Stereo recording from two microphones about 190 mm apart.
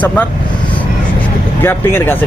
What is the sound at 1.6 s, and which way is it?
Speech, 10° left (ahead or behind).